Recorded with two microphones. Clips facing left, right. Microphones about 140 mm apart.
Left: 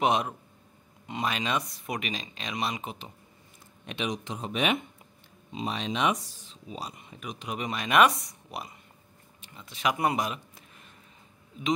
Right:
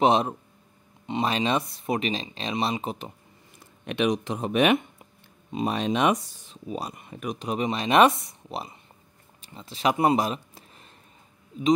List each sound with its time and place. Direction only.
0.0 s speech: 30° right (ahead or behind)
3.5 s speech: 60° right (ahead or behind)
7.4 s speech: 30° right (ahead or behind)